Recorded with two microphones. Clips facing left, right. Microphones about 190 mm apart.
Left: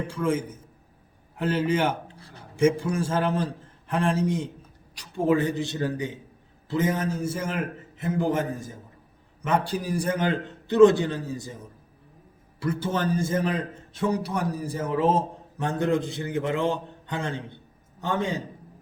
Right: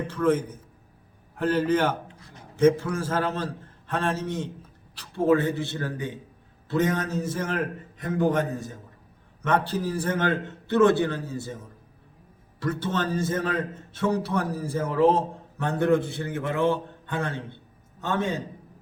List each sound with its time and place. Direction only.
0.1 s a man's voice: 10° left (ahead or behind)
1.6 s a man's voice: 10° left (ahead or behind)
2.0 s a sound: 35° left (ahead or behind)
2.6 s a man's voice: 10° left (ahead or behind)
12.5 s a man's voice: 10° left (ahead or behind)